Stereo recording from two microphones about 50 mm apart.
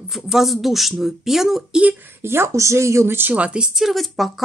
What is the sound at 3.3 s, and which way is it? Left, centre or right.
Speech, right.